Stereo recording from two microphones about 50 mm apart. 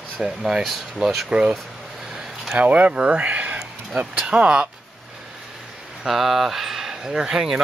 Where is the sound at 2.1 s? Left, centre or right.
Centre.